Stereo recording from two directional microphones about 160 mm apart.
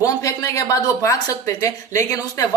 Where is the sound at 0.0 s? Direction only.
20° left (ahead or behind).